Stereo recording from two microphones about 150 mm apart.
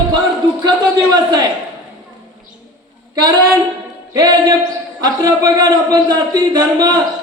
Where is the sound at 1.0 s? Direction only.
25° right (ahead or behind).